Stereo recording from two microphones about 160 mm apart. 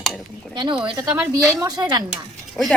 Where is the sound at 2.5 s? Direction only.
5° left (ahead or behind).